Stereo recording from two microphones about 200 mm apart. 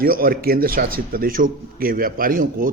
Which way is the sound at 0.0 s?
45° right (ahead or behind).